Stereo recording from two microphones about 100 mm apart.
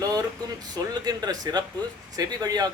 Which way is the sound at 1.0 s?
40° right (ahead or behind).